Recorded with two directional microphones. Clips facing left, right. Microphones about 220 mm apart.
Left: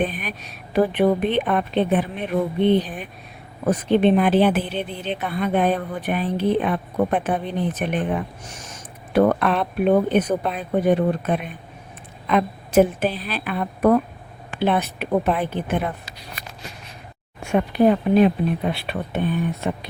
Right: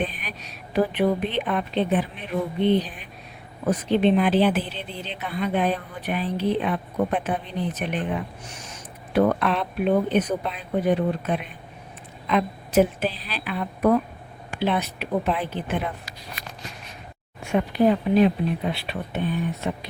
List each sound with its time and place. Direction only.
0.0 s speech: 50° left (ahead or behind)
17.4 s speech: 55° left (ahead or behind)